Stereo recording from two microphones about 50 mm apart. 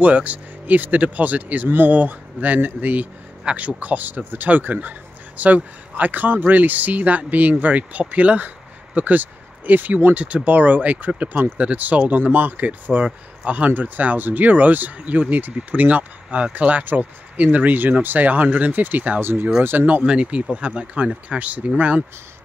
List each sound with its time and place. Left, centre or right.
0.0 s speech: right
10.1 s speech: right
19.6 s speech: right
20.1 s speech: right